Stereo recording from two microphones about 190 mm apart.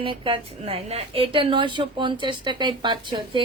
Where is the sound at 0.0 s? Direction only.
25° right (ahead or behind).